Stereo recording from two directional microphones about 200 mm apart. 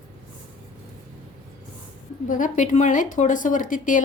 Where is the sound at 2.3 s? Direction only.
40° left (ahead or behind).